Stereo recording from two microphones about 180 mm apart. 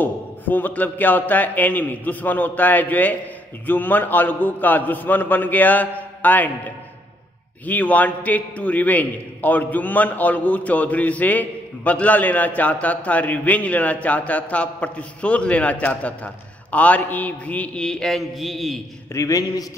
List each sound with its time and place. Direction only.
0.0 s a man's voice: 10° left (ahead or behind)
7.6 s a man's voice: 10° left (ahead or behind)
19.1 s a man's voice: 20° left (ahead or behind)